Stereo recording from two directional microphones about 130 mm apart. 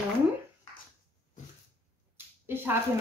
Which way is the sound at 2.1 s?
15° right (ahead or behind).